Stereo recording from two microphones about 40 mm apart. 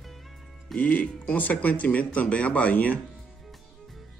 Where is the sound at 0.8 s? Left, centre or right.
Left.